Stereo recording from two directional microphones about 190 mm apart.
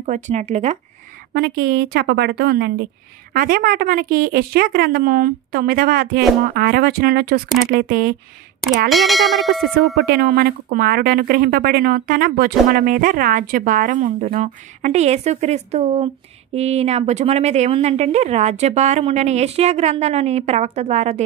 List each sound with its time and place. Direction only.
0.0 s a woman's voice: 40° right (ahead or behind)
1.3 s a woman's voice: 55° right (ahead or behind)
8.6 s speech: centre (ahead or behind)
10.0 s a woman's voice: 55° right (ahead or behind); by 21.2 s 35° right (ahead or behind)